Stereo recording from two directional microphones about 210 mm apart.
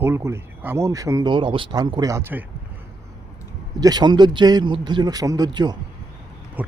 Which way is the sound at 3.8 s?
20° right (ahead or behind).